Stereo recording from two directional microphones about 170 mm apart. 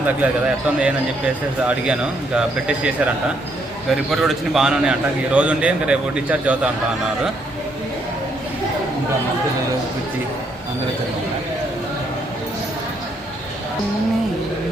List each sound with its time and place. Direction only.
0.0 s a man's voice: 5° right (ahead or behind)
4.1 s a man's voice: centre (ahead or behind)